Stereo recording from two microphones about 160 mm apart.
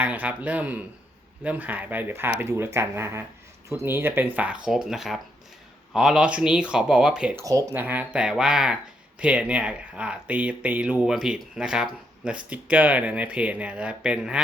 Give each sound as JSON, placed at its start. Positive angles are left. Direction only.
{"t": 0.0, "sound": "speech", "side_deg": -10}
{"t": 7.4, "sound": "speech", "side_deg": -20}